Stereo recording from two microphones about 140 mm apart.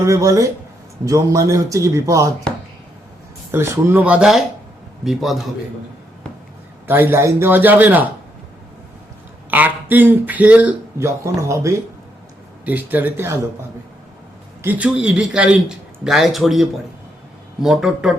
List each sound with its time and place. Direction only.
0.0 s a man's voice: 20° right (ahead or behind)
3.5 s speech: 15° right (ahead or behind); by 5.5 s centre (ahead or behind)
6.8 s speech: 15° right (ahead or behind)
9.5 s speech: 10° right (ahead or behind)
14.6 s speech: 10° right (ahead or behind)